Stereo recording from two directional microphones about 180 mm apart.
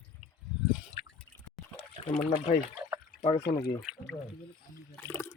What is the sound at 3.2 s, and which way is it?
Speech, 35° left (ahead or behind).